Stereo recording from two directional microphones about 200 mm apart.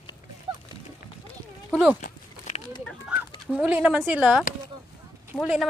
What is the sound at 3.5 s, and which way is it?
Speech, 5° right (ahead or behind).